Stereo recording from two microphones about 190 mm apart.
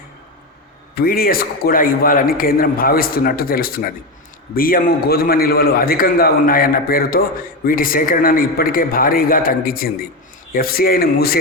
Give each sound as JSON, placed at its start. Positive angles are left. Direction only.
{"t": 0.9, "sound": "a man's voice", "side_deg": 50}